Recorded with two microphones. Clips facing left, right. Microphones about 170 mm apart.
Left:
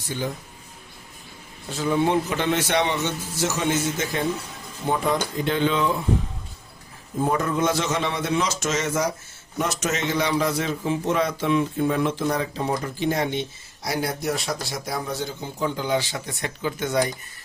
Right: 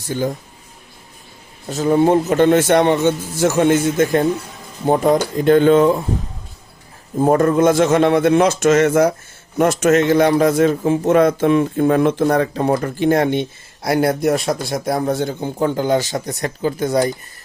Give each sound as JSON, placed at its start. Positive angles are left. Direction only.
{"t": 0.1, "sound": "speech", "side_deg": -45}
{"t": 1.7, "sound": "speech", "side_deg": -45}
{"t": 7.2, "sound": "speech", "side_deg": -50}